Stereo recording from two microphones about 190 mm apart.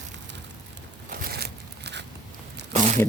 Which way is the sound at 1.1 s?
55° right (ahead or behind).